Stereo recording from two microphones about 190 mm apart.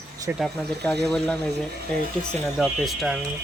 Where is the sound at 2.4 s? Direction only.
Centre (ahead or behind).